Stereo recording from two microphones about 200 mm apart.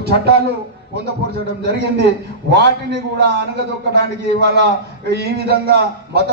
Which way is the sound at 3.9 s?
55° right (ahead or behind).